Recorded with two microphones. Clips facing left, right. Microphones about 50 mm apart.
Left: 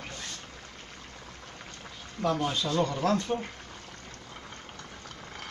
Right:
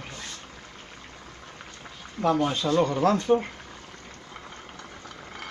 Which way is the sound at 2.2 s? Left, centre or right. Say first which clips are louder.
Right 5 dB; right.